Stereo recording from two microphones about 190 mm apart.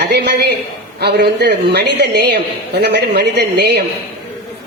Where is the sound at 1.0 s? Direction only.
60° right (ahead or behind).